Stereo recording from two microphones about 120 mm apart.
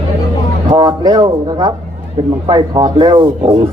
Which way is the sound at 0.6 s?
40° right (ahead or behind).